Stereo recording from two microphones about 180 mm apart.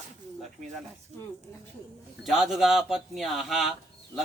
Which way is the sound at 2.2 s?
Centre (ahead or behind).